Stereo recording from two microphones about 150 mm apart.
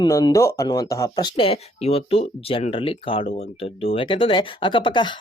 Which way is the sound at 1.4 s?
40° left (ahead or behind).